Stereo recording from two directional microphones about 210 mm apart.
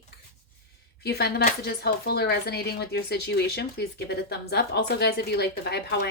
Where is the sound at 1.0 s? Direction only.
50° left (ahead or behind).